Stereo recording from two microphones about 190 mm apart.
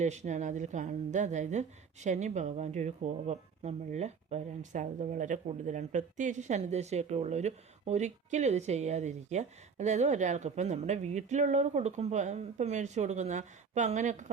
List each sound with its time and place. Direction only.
0.0 s speech: 40° right (ahead or behind)